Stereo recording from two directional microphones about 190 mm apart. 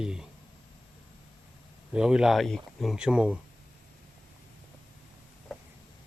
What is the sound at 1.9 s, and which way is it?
Speech, 5° right (ahead or behind).